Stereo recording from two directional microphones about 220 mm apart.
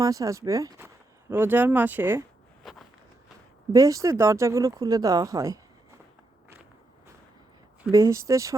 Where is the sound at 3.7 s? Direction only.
15° right (ahead or behind).